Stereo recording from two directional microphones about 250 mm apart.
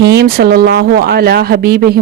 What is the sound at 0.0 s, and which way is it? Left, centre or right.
Speech, right.